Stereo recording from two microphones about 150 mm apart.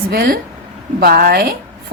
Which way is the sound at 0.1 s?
90° right.